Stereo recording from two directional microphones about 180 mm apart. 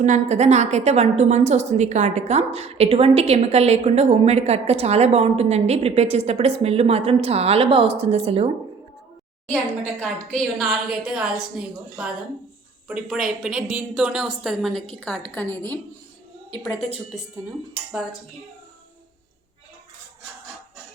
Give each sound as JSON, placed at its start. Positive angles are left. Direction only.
{"t": 0.0, "sound": "a woman's voice", "side_deg": -40}
{"t": 10.0, "sound": "a woman's voice", "side_deg": 0}